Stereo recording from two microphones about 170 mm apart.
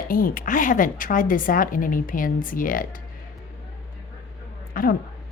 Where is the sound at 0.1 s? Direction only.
55° left (ahead or behind).